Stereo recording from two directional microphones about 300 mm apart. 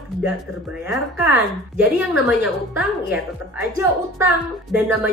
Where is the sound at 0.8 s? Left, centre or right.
Centre.